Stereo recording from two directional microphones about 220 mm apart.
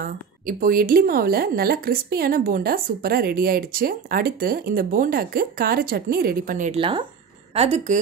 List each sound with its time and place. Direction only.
0.0 s a woman's voice: 40° right (ahead or behind)
6.8 s a woman's voice: 20° right (ahead or behind)